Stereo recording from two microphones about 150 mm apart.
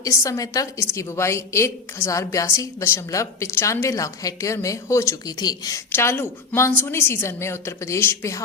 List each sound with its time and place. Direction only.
0.0 s a woman's voice: 20° left (ahead or behind)